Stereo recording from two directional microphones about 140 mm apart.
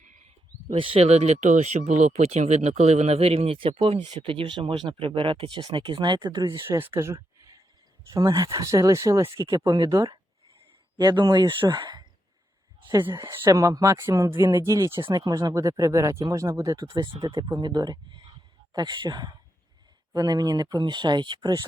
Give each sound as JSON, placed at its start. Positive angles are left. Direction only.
{"t": 0.7, "sound": "speech", "side_deg": -40}
{"t": 6.7, "sound": "speech", "side_deg": -15}
{"t": 12.9, "sound": "speech", "side_deg": -20}
{"t": 17.1, "sound": "speech", "side_deg": -40}